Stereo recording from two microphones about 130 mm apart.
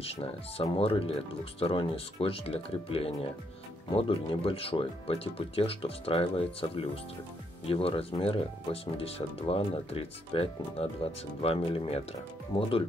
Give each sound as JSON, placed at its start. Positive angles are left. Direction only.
{"t": 0.0, "sound": "speech", "side_deg": 50}